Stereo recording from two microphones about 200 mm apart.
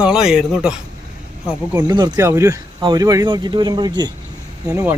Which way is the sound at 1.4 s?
15° right (ahead or behind).